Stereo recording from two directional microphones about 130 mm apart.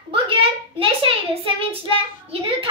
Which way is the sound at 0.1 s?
45° right (ahead or behind).